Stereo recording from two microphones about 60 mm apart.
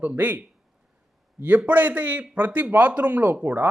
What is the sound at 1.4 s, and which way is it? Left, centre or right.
A man's voice, right.